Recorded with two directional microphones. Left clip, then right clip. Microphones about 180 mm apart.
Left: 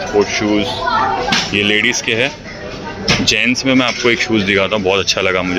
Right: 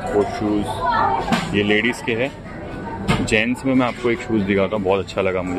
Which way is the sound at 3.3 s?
Centre (ahead or behind).